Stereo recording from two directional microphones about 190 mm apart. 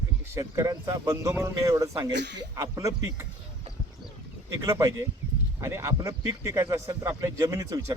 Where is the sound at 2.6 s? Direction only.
15° right (ahead or behind).